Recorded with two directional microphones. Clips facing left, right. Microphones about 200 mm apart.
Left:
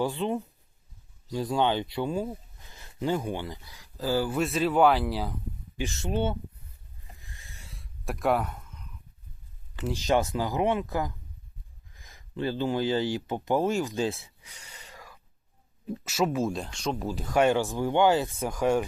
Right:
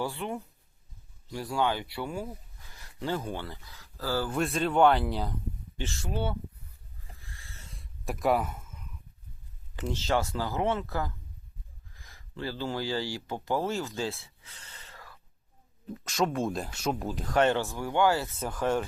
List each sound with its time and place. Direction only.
0.0 s speech: 20° left (ahead or behind)
4.4 s speech: centre (ahead or behind)
6.0 s speech: 25° left (ahead or behind)
7.2 s a sound: 20° left (ahead or behind)
7.7 s throat clearing: centre (ahead or behind)
9.8 s speech: 15° left (ahead or behind)